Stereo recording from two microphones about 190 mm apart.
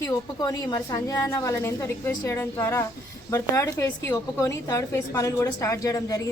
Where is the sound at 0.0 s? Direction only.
20° left (ahead or behind).